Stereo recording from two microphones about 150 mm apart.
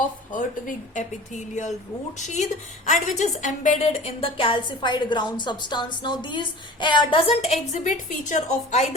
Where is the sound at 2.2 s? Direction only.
50° left (ahead or behind).